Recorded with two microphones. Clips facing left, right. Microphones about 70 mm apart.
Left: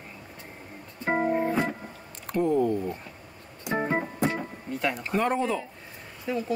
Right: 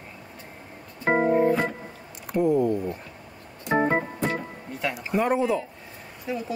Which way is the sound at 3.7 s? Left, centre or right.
Right.